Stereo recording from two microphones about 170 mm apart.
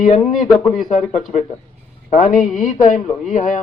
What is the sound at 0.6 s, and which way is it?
Speech, 25° left (ahead or behind).